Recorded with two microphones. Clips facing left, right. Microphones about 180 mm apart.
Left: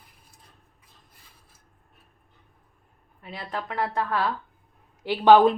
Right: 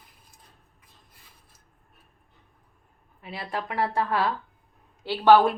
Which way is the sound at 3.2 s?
10° right (ahead or behind).